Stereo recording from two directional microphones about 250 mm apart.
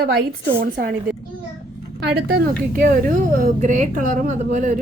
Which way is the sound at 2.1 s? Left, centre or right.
Right.